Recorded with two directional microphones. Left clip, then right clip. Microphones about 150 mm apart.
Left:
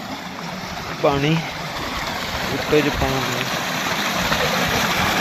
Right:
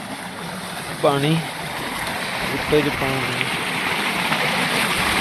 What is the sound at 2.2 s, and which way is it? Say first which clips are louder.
Boat: even; 30° left (ahead or behind).